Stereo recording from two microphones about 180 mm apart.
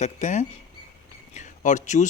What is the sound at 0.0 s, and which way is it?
Speech, 40° left (ahead or behind).